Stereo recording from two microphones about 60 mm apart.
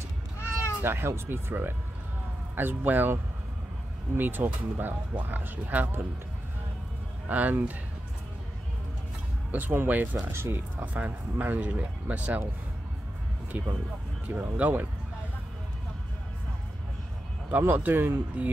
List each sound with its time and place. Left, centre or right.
0.4 s cat: left
0.8 s speech: right
4.2 s speech: right
7.2 s speech: right
9.5 s speech: right
10.8 s speech: right
14.2 s speech: right
17.5 s speech: right